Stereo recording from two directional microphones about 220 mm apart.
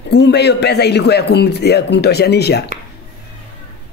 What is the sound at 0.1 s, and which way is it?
A man's voice, 50° left (ahead or behind).